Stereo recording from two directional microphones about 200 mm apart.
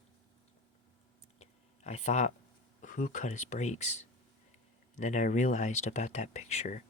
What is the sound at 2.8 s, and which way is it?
Speech, 40° left (ahead or behind).